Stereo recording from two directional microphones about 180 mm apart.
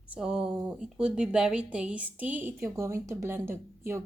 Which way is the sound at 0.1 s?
5° right (ahead or behind).